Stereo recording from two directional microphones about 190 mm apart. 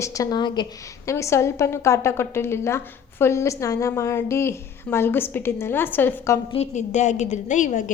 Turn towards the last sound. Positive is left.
turn(degrees=40)  # may be behind; listen again after turning